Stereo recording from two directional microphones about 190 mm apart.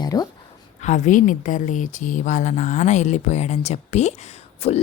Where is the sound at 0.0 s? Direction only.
20° left (ahead or behind).